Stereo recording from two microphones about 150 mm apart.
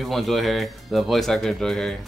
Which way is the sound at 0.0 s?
Centre (ahead or behind).